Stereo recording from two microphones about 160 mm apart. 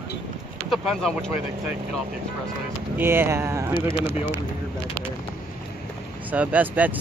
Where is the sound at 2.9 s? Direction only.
15° right (ahead or behind).